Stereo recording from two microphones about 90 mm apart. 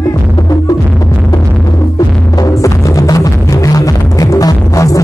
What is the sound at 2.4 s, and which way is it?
Music, 40° left (ahead or behind).